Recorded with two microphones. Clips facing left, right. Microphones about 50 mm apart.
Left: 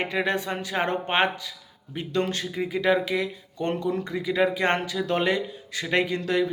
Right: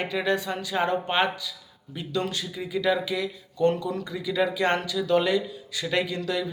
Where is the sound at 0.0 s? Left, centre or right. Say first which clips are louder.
Even; left.